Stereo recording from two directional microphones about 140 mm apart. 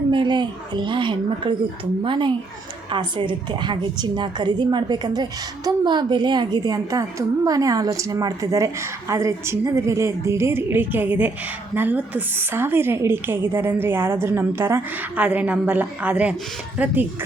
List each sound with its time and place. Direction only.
0.1 s a woman's voice: 35° right (ahead or behind); by 17.1 s 10° right (ahead or behind)